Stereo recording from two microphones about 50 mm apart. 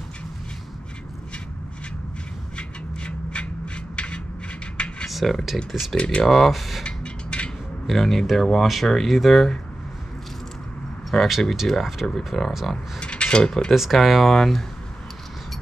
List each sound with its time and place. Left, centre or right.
2.5 s a sound: left
5.0 s speech: centre
5.9 s speech: left
6.2 s speech: centre
6.8 s a sound: centre
7.8 s speech: centre
11.1 s speech: centre
13.0 s mechanisms: left
13.7 s speech: centre